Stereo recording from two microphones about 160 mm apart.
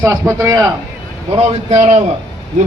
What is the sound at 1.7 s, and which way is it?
Speech, 45° right (ahead or behind).